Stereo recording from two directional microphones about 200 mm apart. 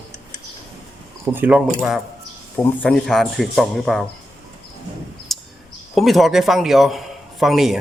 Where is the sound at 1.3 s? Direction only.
10° right (ahead or behind).